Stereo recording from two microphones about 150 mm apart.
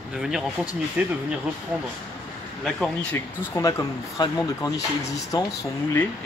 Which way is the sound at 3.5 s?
20° left (ahead or behind).